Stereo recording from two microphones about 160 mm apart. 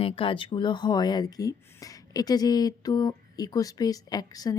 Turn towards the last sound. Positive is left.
turn(degrees=25)  # may be behind; listen again after turning